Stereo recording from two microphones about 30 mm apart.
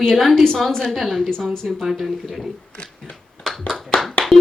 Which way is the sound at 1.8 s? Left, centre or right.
Centre.